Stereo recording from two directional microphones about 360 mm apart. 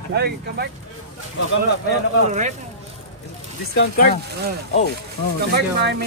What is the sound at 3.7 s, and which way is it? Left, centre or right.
Speech, left.